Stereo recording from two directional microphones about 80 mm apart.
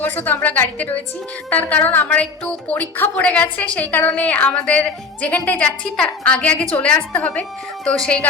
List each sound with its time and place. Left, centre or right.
0.0 s a woman's voice: left